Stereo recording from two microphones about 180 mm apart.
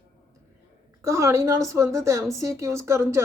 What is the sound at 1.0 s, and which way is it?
A woman's voice, 15° right (ahead or behind).